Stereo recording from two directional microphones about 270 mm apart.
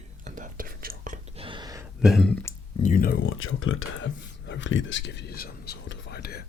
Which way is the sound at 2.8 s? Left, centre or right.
Left.